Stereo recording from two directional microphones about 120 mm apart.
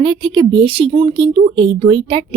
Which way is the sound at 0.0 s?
45° right (ahead or behind).